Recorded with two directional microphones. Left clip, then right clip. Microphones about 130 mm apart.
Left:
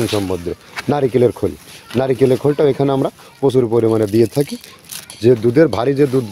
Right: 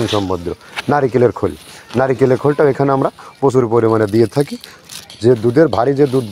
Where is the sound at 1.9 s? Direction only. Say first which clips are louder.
Right 1 dB; 25° left (ahead or behind).